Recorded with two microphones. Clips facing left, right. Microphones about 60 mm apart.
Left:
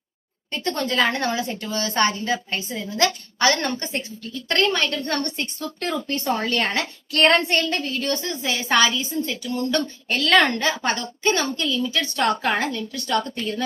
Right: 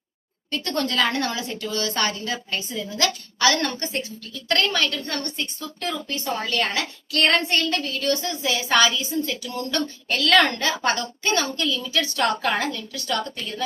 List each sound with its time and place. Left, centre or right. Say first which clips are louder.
0.5 s a woman's voice: left 1 dB; left
5.0 s a woman's voice: left 4 dB; left
6.6 s a woman's voice: left 1 dB; left